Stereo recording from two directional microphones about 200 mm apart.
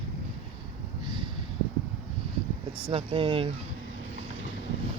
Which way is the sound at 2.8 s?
25° right (ahead or behind).